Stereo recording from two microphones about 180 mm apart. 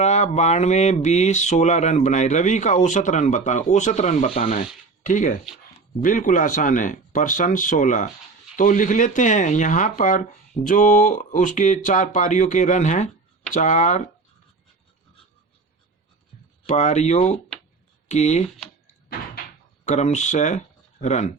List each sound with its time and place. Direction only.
0.0 s speech: 40° left (ahead or behind)
16.6 s speech: 40° left (ahead or behind)
19.8 s speech: 40° left (ahead or behind)